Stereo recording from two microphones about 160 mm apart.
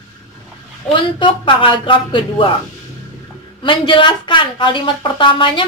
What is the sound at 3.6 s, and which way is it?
Speech, 30° left (ahead or behind).